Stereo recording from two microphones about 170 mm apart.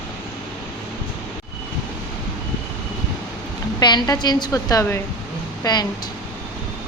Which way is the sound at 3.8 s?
25° left (ahead or behind).